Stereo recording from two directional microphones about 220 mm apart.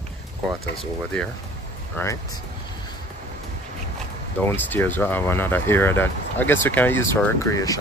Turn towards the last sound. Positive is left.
turn(degrees=15)  # may be behind; listen again after turning